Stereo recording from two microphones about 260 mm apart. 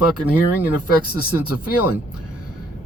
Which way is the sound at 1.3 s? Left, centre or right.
Left.